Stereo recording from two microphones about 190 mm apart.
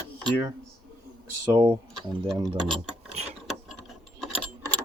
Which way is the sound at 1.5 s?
15° right (ahead or behind).